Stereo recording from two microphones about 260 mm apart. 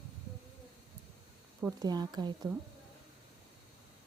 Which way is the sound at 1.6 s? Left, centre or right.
Centre.